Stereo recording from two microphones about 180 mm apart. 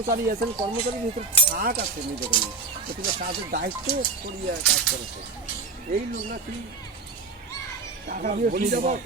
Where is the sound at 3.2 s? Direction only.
60° right (ahead or behind).